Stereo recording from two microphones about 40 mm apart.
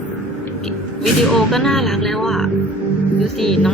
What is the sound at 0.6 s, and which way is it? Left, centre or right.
Speech, centre.